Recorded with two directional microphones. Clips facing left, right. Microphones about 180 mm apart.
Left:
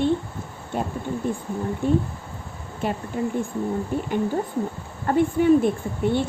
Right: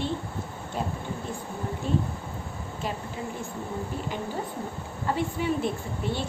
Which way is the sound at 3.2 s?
55° left (ahead or behind).